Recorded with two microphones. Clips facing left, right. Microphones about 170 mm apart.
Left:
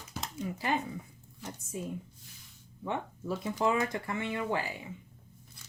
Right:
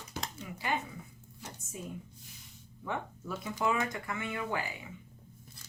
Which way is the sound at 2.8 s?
30° left (ahead or behind).